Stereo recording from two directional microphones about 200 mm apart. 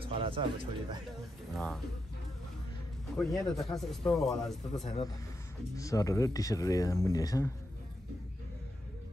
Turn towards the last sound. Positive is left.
turn(degrees=15)  # may be behind; listen again after turning